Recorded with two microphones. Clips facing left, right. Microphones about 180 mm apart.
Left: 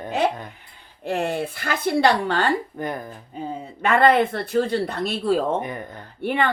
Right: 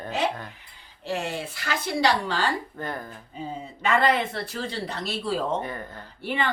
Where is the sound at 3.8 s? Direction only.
55° left (ahead or behind).